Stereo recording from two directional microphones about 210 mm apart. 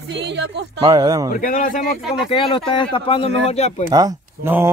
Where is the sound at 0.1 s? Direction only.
55° right (ahead or behind).